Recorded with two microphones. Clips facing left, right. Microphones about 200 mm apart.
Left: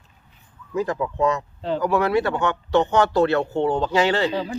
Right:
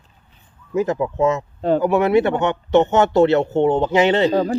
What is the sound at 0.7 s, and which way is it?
Speech, 20° right (ahead or behind).